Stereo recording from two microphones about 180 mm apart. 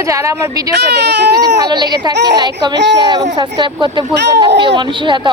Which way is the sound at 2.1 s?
70° right (ahead or behind).